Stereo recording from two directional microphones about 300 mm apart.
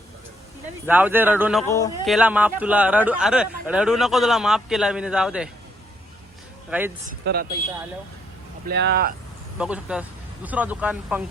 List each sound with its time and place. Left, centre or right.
0.9 s speech: centre
1.6 s speech: centre
2.0 s speech: centre
6.7 s speech: centre
7.3 s speech: right
8.6 s speech: right
9.6 s speech: centre